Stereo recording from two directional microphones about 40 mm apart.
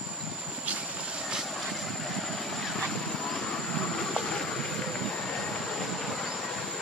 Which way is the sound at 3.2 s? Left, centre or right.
Centre.